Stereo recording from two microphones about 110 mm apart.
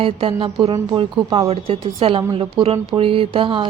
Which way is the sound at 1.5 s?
60° right (ahead or behind).